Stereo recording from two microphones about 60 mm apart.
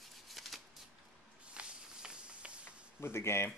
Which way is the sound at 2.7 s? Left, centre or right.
Left.